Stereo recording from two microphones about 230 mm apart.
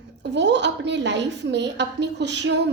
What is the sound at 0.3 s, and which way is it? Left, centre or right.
A woman's voice, right.